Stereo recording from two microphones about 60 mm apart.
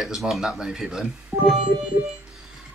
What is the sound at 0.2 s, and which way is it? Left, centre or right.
Speech, centre.